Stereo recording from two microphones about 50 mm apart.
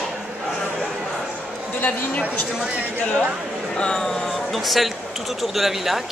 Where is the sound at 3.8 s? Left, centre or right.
Centre.